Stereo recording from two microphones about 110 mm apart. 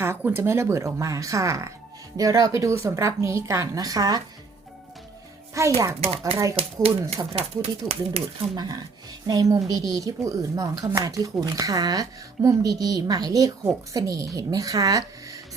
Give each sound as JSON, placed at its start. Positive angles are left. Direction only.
{"t": 0.0, "sound": "a woman's voice", "side_deg": -20}
{"t": 5.5, "sound": "a woman's voice", "side_deg": -25}
{"t": 6.0, "sound": "speech", "side_deg": -65}
{"t": 6.3, "sound": "a woman's voice", "side_deg": -30}
{"t": 7.3, "sound": "speech", "side_deg": -70}
{"t": 9.2, "sound": "speech", "side_deg": -35}